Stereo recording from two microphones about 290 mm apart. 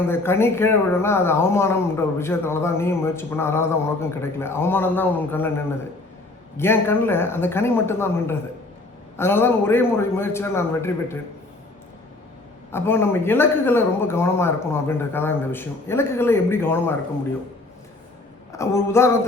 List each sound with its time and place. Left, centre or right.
0.1 s a man's voice: centre
12.7 s a man's voice: centre
18.5 s a man's voice: centre